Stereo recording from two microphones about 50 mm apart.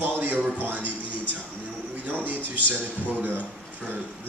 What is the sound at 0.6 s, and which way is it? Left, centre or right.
Speech, right.